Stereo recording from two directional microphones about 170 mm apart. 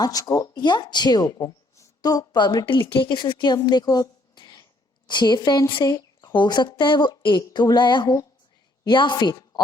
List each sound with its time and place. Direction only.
0.0 s speech: 20° left (ahead or behind)